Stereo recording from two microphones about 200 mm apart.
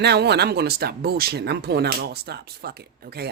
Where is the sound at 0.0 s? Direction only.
55° right (ahead or behind).